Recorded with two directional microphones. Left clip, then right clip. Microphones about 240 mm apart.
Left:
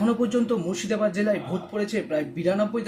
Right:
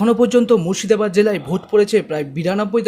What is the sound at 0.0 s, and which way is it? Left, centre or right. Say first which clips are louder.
Speech: right 10 dB; right.